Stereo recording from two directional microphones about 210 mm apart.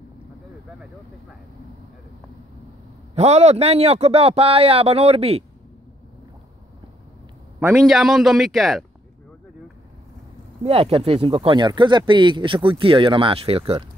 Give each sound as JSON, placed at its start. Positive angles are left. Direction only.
{"t": 3.2, "sound": "speech", "side_deg": -30}
{"t": 7.7, "sound": "a man's voice", "side_deg": 0}
{"t": 10.6, "sound": "speech", "side_deg": -30}